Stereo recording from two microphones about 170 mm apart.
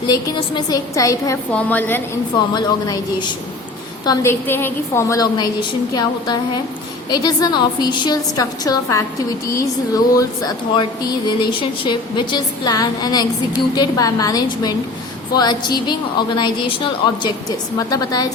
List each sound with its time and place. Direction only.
0.1 s a woman's voice: 25° left (ahead or behind)
2.5 s a woman's voice: 25° left (ahead or behind)